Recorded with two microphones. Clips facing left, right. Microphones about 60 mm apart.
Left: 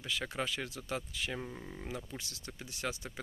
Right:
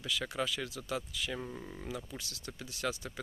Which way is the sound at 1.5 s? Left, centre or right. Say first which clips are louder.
Right 1 dB; centre.